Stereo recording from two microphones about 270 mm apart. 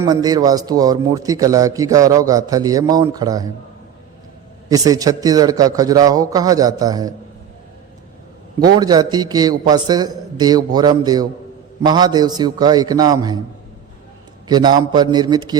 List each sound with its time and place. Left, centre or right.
0.0 s speech: centre
4.7 s speech: centre
8.5 s speech: centre
14.4 s speech: centre